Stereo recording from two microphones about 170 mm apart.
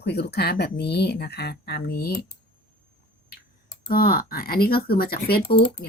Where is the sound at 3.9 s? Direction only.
60° left (ahead or behind).